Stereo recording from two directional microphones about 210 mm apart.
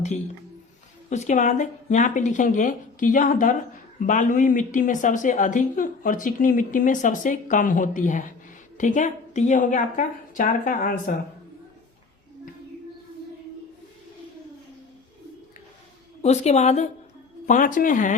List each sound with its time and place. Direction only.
1.1 s speech: 35° left (ahead or behind)
16.2 s speech: 30° left (ahead or behind)